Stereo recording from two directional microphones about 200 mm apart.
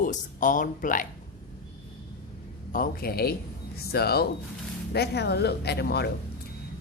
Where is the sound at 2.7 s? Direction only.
50° left (ahead or behind).